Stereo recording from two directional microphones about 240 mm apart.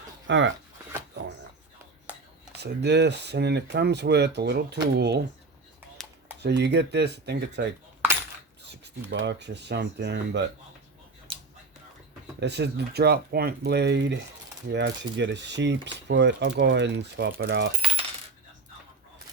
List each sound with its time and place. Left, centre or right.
0.3 s speech: right
2.6 s speech: right
6.0 s a sound: centre
6.4 s speech: right
9.0 s speech: right
11.3 s a sound: right
12.4 s speech: right